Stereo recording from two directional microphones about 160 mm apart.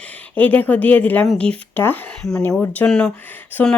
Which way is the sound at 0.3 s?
10° left (ahead or behind).